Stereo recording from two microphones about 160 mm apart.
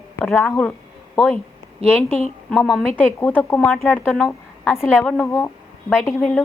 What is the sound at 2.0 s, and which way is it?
A woman's voice, centre (ahead or behind).